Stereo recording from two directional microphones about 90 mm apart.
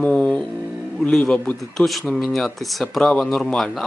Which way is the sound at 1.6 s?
Centre (ahead or behind).